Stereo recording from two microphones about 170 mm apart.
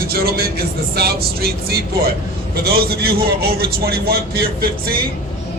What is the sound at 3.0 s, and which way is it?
Speech, 65° right (ahead or behind).